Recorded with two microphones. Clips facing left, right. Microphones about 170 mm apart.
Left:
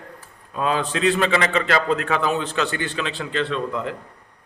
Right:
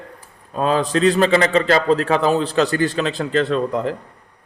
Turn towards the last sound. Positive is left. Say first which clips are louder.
# right 6 dB
turn(degrees=-35)  # may be behind; listen again after turning